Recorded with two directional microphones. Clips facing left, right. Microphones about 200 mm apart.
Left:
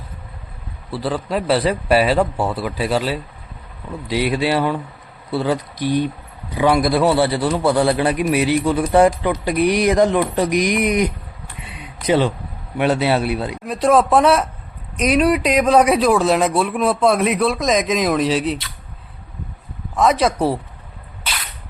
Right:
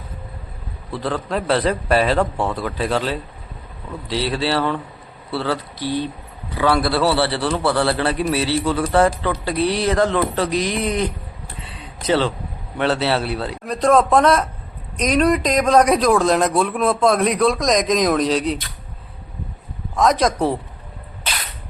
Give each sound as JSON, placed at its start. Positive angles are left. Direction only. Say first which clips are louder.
{"t": 0.9, "sound": "a man's voice", "louder": "left 1 dB", "side_deg": 10}
{"t": 11.6, "sound": "a sound", "louder": "left 2 dB", "side_deg": 15}
{"t": 12.7, "sound": "a man's voice", "louder": "left 2 dB", "side_deg": 15}
{"t": 20.0, "sound": "a man's voice", "louder": "left 1 dB", "side_deg": 5}